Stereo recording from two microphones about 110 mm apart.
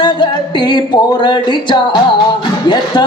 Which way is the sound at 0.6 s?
40° left (ahead or behind).